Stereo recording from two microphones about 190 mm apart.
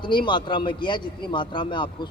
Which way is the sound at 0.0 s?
25° left (ahead or behind).